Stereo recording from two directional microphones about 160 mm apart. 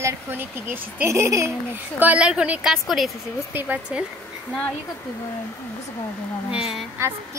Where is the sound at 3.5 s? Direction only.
10° right (ahead or behind).